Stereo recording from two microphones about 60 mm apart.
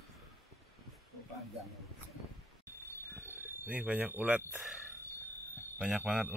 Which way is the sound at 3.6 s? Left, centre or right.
Right.